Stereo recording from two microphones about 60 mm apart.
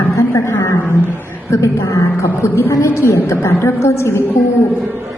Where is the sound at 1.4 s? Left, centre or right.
Left.